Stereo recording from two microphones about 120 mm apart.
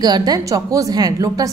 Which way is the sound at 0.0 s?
35° right (ahead or behind).